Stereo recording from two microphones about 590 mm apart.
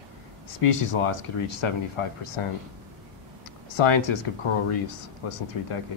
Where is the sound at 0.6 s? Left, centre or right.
Left.